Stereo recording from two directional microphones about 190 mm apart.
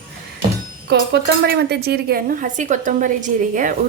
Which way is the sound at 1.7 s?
55° right (ahead or behind).